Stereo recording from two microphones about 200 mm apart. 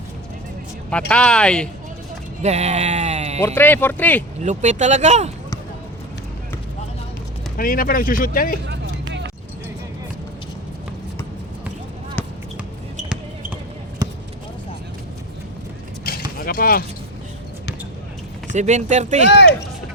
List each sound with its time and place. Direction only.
0.9 s speech: 5° left (ahead or behind)
2.4 s speech: 35° right (ahead or behind)
3.4 s speech: 10° left (ahead or behind)
4.4 s speech: 35° right (ahead or behind)
7.5 s speech: 45° left (ahead or behind)
8.6 s vehicle: 60° right (ahead or behind)
14.0 s basketball bounce: 20° right (ahead or behind)
16.0 s a sound: 45° left (ahead or behind)
18.5 s speech: 35° right (ahead or behind)